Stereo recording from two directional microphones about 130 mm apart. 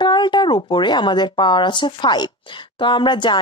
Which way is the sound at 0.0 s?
35° left (ahead or behind).